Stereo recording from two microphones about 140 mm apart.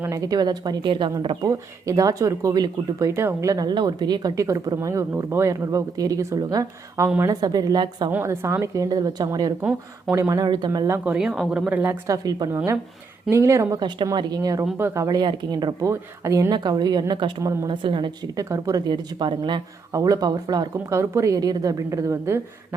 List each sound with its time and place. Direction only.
0.0 s a woman's voice: 25° right (ahead or behind)
1.5 s speech: 25° right (ahead or behind)
8.1 s a woman's voice: 20° right (ahead or behind)
12.0 s speech: 25° right (ahead or behind)
12.5 s a woman's voice: 15° right (ahead or behind)
14.6 s speech: 15° right (ahead or behind); by 17.3 s 35° right (ahead or behind)
17.4 s speech: 20° right (ahead or behind)
17.7 s a woman's voice: 35° right (ahead or behind)
18.3 s speech: 20° right (ahead or behind)